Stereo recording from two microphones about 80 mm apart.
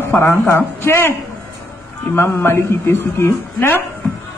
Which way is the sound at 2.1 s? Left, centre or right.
Left.